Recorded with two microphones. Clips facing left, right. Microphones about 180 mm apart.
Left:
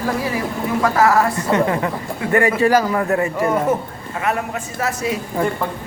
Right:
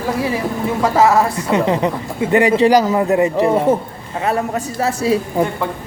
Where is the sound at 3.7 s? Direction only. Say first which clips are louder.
Right 4 dB; 30° right (ahead or behind).